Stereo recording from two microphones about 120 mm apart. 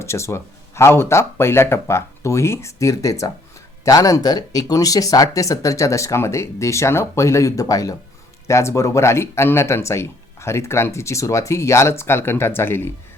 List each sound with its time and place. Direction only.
0.0 s speech: 25° left (ahead or behind)